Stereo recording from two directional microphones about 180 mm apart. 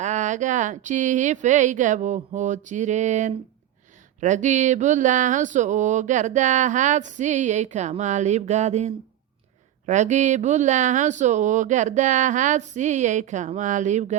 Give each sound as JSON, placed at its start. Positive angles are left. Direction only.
{"t": 0.0, "sound": "speech", "side_deg": -45}